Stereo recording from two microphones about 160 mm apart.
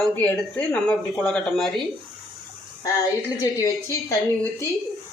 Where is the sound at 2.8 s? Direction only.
20° left (ahead or behind).